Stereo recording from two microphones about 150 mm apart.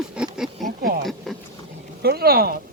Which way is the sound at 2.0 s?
90° right.